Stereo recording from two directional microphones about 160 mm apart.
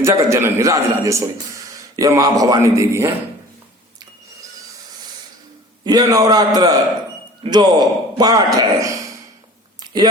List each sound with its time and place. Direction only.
0.0 s a man's voice: 15° right (ahead or behind)
5.8 s a man's voice: 25° right (ahead or behind)
9.8 s a sound: 25° right (ahead or behind)